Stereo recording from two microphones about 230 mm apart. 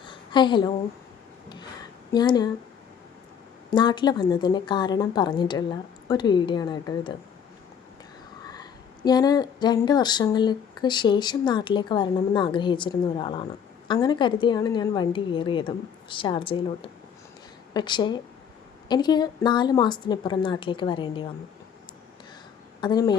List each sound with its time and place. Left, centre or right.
0.0 s a sound: centre
2.1 s a woman's voice: centre
3.7 s speech: centre
9.0 s speech: centre
22.8 s a woman's voice: centre